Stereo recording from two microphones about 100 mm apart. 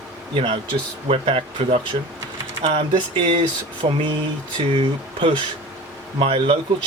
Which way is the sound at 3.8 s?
75° right (ahead or behind).